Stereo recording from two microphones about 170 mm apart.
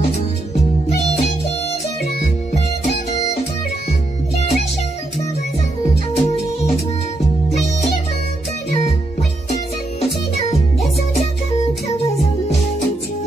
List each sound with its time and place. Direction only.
6.1 s music: 40° left (ahead or behind)
9.9 s music: 40° left (ahead or behind)